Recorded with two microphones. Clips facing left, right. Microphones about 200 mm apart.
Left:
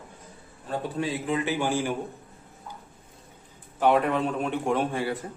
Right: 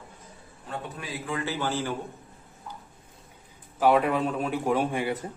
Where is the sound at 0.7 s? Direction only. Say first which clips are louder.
Left 7 dB; 30° left (ahead or behind); by 2.0 s 15° left (ahead or behind).